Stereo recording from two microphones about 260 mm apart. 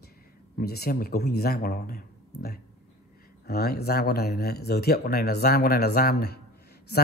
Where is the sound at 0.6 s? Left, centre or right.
Left.